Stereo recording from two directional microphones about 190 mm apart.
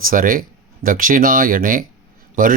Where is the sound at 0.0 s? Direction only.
45° right (ahead or behind).